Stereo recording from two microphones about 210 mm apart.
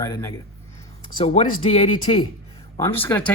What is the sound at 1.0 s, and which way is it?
Speech, 25° left (ahead or behind).